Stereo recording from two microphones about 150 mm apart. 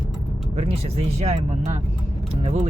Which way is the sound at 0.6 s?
40° right (ahead or behind).